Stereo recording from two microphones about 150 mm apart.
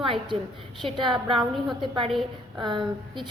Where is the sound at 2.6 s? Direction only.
30° right (ahead or behind).